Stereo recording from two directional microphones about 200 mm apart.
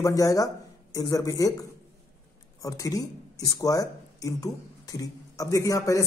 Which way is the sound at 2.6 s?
15° left (ahead or behind).